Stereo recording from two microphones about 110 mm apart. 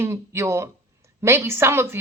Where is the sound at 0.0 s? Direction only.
25° right (ahead or behind).